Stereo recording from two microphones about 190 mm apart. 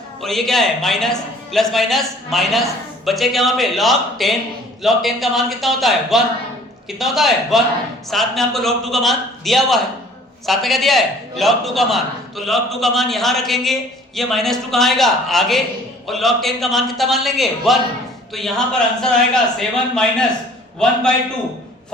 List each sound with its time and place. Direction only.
0.2 s a man's voice: centre (ahead or behind)